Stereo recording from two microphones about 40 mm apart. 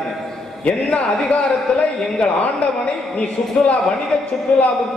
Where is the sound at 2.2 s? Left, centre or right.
Left.